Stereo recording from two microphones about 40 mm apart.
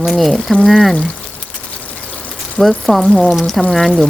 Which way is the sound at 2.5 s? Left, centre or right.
Centre.